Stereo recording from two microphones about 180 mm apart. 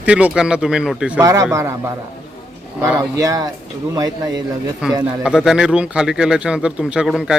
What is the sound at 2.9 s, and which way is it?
Speech, 20° right (ahead or behind).